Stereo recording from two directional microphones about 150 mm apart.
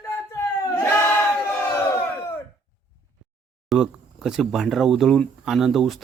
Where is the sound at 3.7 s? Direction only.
5° right (ahead or behind).